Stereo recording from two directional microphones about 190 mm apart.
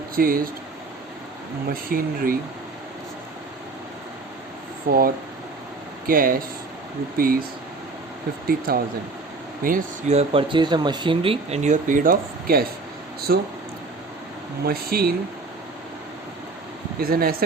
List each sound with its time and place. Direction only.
0.2 s speech: 50° right (ahead or behind)
1.7 s speech: 50° right (ahead or behind)
4.9 s speech: 50° right (ahead or behind)
8.4 s speech: 50° right (ahead or behind)
14.6 s speech: 50° right (ahead or behind)
17.0 s speech: 50° right (ahead or behind)